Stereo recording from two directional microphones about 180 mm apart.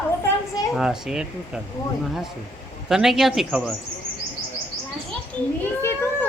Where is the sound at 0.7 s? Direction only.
5° right (ahead or behind).